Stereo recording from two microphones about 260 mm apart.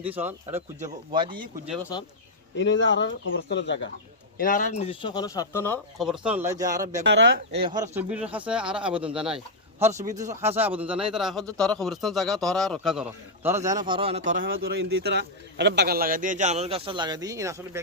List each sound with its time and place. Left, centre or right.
0.0 s speech: centre
0.8 s speech: centre
2.6 s speech: left
4.4 s speech: left; by 7.0 s centre
7.0 s speech: right
7.5 s a man's voice: centre
13.8 s a man's voice: centre